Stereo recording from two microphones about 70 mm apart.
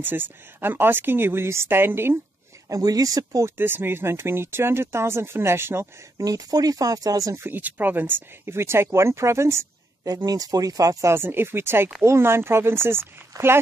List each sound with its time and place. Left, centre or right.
0.0 s speech: right
2.7 s speech: right
3.4 s speech: right
6.1 s speech: right
7.4 s speech: right
10.0 s speech: right
11.1 s speech: right
13.3 s speech: right